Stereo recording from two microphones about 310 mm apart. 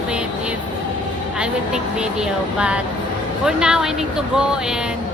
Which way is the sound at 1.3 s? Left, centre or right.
Centre.